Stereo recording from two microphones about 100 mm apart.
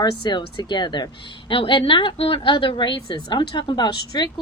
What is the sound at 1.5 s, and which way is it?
A woman's voice, 60° left (ahead or behind).